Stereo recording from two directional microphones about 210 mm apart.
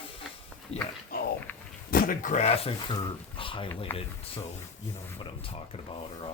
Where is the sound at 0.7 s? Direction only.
30° left (ahead or behind).